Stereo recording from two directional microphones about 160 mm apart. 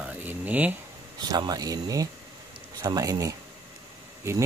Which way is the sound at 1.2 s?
25° right (ahead or behind).